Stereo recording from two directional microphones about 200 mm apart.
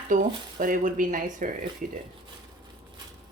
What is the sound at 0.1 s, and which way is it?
Speech, 40° right (ahead or behind).